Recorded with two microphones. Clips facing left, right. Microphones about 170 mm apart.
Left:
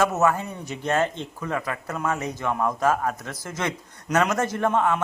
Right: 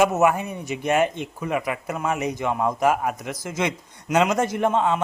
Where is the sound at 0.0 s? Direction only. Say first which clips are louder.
Right 3 dB; 15° right (ahead or behind).